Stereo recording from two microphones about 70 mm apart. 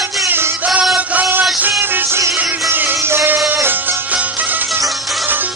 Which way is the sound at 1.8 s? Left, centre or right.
Right.